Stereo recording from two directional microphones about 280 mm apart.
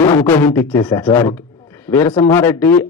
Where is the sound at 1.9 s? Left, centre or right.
Left.